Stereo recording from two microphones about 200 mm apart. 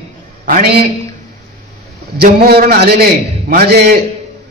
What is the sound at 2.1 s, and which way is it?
A man's voice, 50° right (ahead or behind).